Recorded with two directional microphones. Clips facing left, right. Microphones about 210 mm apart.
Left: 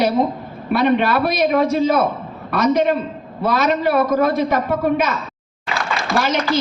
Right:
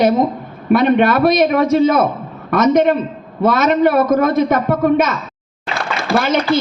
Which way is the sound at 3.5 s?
50° right (ahead or behind).